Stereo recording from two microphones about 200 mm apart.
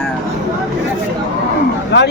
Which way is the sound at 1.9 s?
60° left (ahead or behind).